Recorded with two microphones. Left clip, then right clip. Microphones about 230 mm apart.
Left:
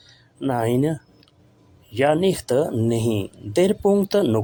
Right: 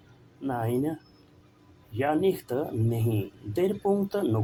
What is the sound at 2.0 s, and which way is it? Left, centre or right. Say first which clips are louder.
Speech: left 7 dB; left.